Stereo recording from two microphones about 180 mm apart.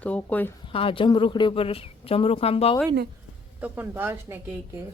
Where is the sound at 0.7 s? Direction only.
30° left (ahead or behind).